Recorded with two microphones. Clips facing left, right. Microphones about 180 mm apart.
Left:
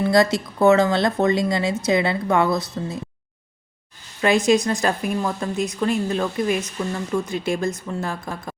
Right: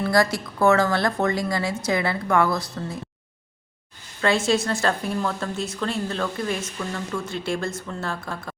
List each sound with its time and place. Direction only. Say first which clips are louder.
0.0 s speech: left 4 dB; 20° left (ahead or behind)
4.2 s speech: left 4 dB; 15° left (ahead or behind)